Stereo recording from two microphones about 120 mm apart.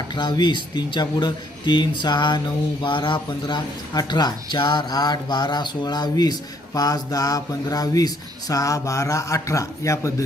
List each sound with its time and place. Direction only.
0.1 s speech: 40° left (ahead or behind)